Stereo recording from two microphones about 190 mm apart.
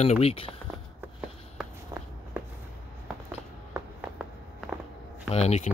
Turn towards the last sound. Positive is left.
turn(degrees=35)  # may be behind; listen again after turning